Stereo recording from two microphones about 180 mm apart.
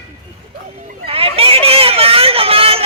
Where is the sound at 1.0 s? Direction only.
35° right (ahead or behind).